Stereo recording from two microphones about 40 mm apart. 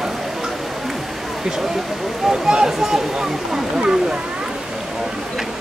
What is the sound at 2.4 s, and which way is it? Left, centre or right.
Speech, centre.